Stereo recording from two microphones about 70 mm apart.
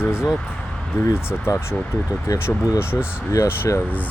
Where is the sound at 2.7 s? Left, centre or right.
Left.